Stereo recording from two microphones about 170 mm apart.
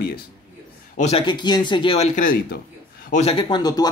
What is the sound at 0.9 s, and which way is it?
Speech, 40° left (ahead or behind).